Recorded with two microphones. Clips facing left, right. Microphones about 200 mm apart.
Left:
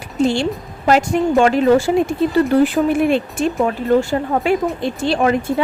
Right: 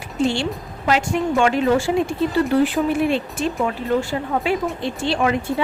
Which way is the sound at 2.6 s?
50° left (ahead or behind).